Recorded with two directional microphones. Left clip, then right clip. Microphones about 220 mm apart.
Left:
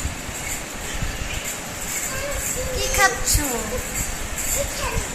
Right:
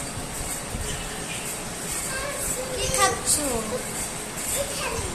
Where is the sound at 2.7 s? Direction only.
Centre (ahead or behind).